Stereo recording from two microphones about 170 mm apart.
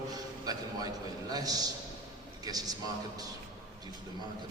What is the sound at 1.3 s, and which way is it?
A man's voice, 20° right (ahead or behind).